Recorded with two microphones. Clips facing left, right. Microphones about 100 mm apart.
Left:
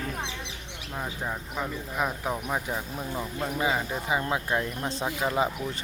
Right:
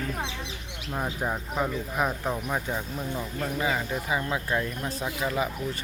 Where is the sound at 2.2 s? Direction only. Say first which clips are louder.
Right 1 dB; 10° left (ahead or behind).